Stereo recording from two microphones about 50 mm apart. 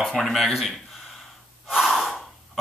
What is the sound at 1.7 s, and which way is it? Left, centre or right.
Gasp, centre.